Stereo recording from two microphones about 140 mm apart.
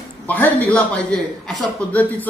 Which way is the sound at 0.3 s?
10° left (ahead or behind).